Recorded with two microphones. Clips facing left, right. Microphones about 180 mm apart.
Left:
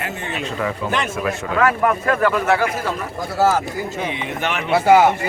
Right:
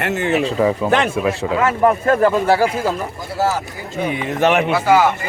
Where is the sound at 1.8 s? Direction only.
35° right (ahead or behind).